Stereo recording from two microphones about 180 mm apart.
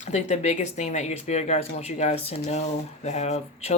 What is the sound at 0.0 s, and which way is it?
Speech, 40° left (ahead or behind).